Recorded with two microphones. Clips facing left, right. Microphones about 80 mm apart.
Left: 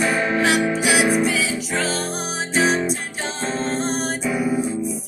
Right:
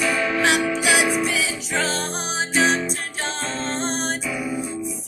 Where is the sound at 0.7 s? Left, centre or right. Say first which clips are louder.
Left 2 dB; centre.